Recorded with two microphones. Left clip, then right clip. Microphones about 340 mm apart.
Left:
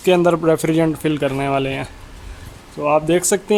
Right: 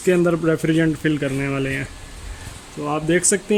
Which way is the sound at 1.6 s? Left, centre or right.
Left.